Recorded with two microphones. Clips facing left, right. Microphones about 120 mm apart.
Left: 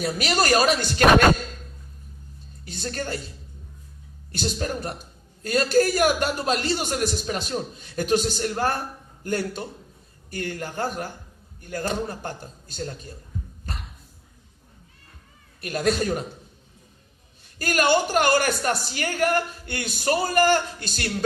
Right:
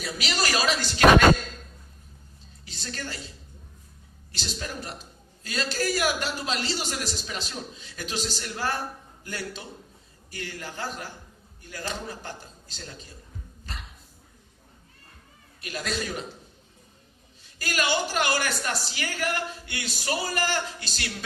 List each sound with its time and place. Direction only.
0.0 s a man's voice: 50° left (ahead or behind)
2.6 s a man's voice: 50° left (ahead or behind)
4.3 s a man's voice: 50° left (ahead or behind)
13.7 s a sound: 50° left (ahead or behind)
15.6 s a man's voice: 50° left (ahead or behind)
17.6 s a man's voice: 50° left (ahead or behind)